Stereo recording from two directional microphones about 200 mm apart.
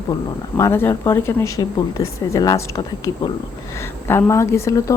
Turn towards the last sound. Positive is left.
turn(degrees=15)  # may be behind; listen again after turning